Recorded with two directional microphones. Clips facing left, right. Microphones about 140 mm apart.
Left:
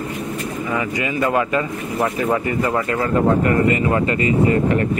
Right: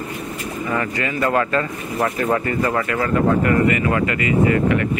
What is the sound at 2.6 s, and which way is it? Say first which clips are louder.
Speech: left 1 dB; 20° left (ahead or behind).